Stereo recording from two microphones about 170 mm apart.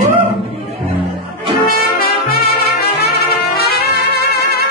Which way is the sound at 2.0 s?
60° left (ahead or behind).